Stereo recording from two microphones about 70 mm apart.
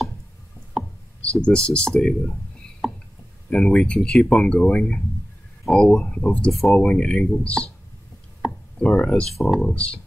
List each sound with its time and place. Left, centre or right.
1.2 s speech: centre
3.4 s speech: centre
6.5 s speech: centre
8.4 s a sound: centre
8.7 s speech: centre
9.3 s speech: centre
9.6 s speech: centre